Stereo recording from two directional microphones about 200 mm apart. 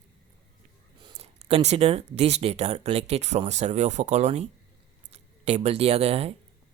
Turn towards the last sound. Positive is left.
turn(degrees=-30)  # may be behind; listen again after turning